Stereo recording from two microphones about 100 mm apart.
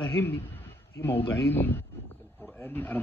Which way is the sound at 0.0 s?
20° left (ahead or behind).